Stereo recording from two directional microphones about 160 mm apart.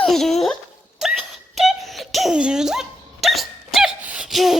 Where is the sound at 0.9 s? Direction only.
Centre (ahead or behind).